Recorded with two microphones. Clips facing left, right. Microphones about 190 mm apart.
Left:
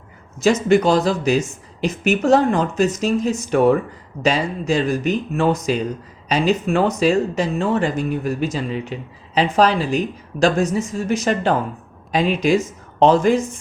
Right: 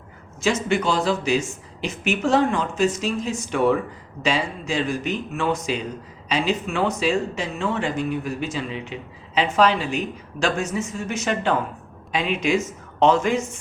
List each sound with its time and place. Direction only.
0.4 s speech: 40° left (ahead or behind)